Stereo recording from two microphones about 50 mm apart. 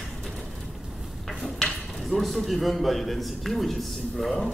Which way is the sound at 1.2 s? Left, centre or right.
Centre.